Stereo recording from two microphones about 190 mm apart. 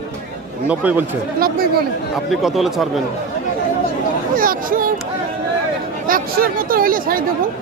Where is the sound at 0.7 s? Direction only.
10° right (ahead or behind).